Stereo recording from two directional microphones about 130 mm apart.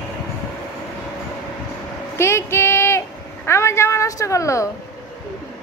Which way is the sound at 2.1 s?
20° left (ahead or behind).